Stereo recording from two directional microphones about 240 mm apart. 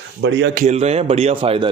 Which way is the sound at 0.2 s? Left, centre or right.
Right.